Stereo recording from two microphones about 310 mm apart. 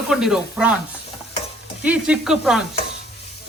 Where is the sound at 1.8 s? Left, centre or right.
Centre.